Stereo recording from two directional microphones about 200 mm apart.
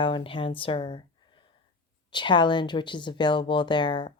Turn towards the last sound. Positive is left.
turn(degrees=25)  # may be behind; listen again after turning